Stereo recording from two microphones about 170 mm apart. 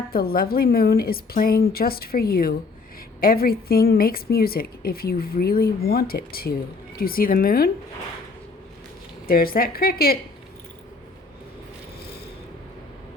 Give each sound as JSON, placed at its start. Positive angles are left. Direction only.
{"t": 0.1, "sound": "speech", "side_deg": 60}
{"t": 9.2, "sound": "speech", "side_deg": 60}